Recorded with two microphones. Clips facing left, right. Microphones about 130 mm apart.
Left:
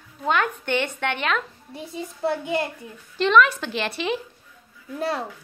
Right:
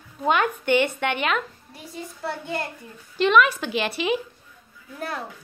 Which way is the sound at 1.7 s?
20° left (ahead or behind).